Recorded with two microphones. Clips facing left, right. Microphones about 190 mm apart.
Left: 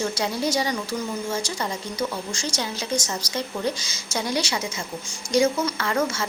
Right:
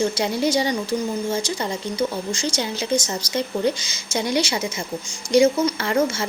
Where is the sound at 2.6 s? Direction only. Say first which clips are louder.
Right 4 dB; 25° right (ahead or behind).